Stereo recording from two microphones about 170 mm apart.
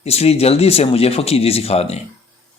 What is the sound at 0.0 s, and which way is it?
A man's voice, 35° left (ahead or behind).